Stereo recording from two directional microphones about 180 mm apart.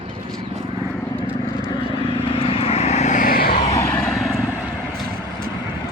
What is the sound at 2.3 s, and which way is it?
Vehicle, 30° left (ahead or behind).